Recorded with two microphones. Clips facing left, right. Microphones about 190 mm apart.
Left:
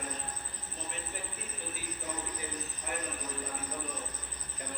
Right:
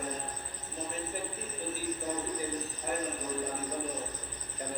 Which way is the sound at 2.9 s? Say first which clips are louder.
Right 5 dB; 40° right (ahead or behind).